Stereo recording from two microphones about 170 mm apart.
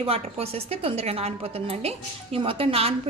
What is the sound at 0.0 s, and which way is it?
A woman's voice, 35° right (ahead or behind).